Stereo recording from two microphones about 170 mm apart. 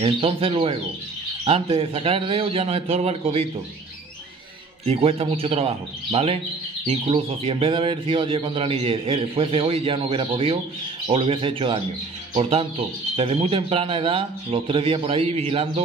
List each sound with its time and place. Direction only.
0.0 s speech: 30° right (ahead or behind)
4.8 s speech: 35° right (ahead or behind)